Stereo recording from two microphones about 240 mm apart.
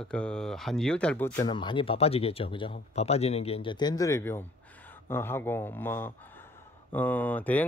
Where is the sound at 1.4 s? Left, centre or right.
Centre.